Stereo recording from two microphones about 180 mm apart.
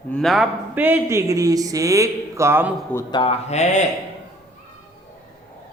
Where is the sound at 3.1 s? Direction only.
30° left (ahead or behind).